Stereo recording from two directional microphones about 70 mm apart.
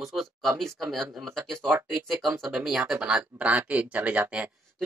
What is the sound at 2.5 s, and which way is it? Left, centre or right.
Speech, centre.